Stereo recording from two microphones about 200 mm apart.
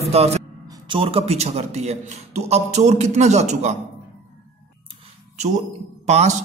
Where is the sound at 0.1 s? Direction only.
30° right (ahead or behind).